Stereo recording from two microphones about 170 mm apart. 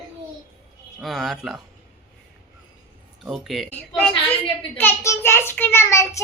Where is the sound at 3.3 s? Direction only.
Centre (ahead or behind).